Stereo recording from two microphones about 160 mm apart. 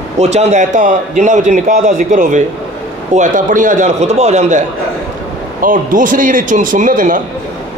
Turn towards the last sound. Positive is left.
turn(degrees=-55)  # may be behind; listen again after turning